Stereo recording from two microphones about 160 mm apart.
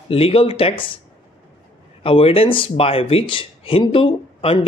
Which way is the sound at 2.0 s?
35° left (ahead or behind).